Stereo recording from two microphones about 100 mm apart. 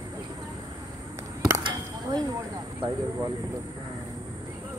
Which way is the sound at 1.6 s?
55° right (ahead or behind).